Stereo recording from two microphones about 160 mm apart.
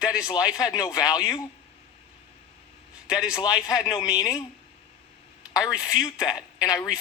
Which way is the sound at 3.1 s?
5° right (ahead or behind).